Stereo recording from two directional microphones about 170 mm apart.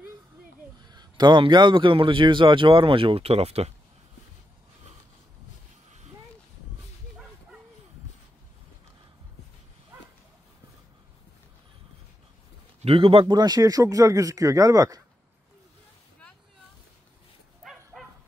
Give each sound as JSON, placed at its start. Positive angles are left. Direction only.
{"t": 0.8, "sound": "a man's voice", "side_deg": -25}
{"t": 12.8, "sound": "a man's voice", "side_deg": -30}
{"t": 17.9, "sound": "dog", "side_deg": 0}